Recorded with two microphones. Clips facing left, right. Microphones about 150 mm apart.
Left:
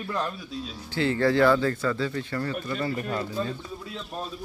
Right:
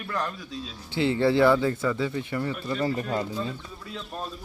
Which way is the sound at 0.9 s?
20° right (ahead or behind).